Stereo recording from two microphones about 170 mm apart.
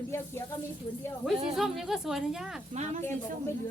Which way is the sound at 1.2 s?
Centre (ahead or behind).